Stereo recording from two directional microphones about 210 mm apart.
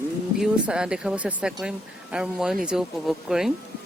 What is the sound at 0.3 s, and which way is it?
Speech, 5° right (ahead or behind).